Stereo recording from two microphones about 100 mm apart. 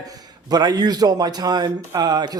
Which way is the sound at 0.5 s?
45° right (ahead or behind).